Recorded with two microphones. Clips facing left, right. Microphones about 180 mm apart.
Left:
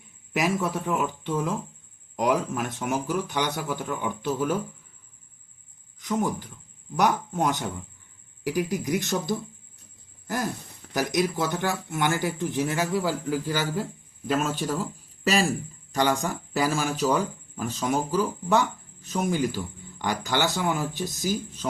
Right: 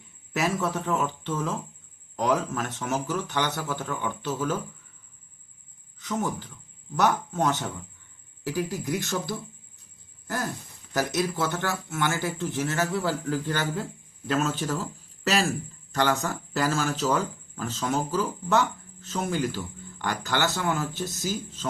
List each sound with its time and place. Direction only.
0.3 s speech: 10° left (ahead or behind)
6.0 s speech: 15° left (ahead or behind)